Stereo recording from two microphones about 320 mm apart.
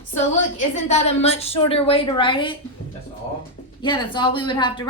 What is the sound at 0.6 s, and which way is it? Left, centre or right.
A woman's voice, left.